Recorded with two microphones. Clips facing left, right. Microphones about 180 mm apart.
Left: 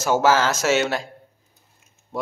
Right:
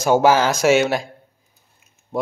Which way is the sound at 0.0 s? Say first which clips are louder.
Right 3 dB; 15° right (ahead or behind).